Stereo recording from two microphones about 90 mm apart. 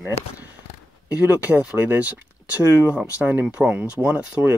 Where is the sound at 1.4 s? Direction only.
20° right (ahead or behind).